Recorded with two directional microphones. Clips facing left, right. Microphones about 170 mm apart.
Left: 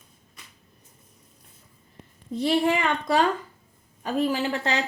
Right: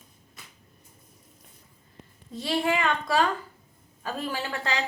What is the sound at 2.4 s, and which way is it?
A child's voice, 20° left (ahead or behind).